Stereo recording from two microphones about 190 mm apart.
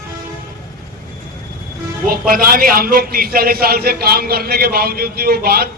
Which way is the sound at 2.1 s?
50° right (ahead or behind).